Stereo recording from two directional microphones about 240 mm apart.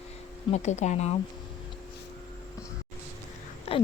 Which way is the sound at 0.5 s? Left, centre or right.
Left.